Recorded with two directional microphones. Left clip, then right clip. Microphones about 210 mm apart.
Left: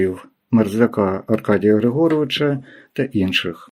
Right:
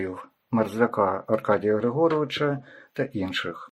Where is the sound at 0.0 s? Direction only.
30° left (ahead or behind).